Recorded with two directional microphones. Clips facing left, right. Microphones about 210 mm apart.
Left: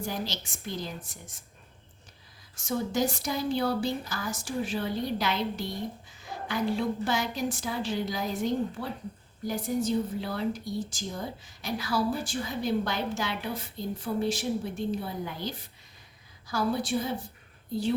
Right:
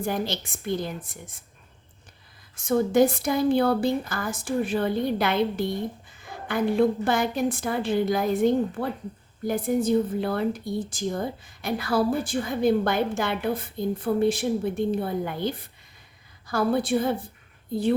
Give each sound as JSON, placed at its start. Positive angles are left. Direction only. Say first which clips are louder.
{"t": 0.0, "sound": "speech", "louder": "right 6 dB", "side_deg": -55}
{"t": 2.6, "sound": "speech", "louder": "right 8 dB", "side_deg": -55}